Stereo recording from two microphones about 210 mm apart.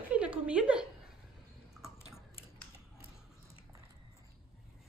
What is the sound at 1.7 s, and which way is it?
Squish, centre (ahead or behind).